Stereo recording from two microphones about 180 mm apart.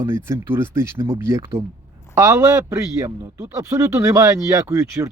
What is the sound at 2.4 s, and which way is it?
Speech, 5° right (ahead or behind).